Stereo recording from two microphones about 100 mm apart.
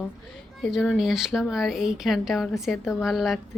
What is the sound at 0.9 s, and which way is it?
Speech, 5° right (ahead or behind).